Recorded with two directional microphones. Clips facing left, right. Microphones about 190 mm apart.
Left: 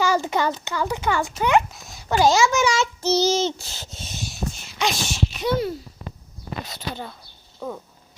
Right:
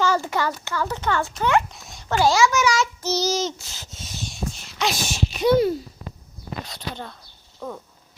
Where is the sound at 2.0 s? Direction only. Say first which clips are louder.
Left 1 dB; 15° left (ahead or behind).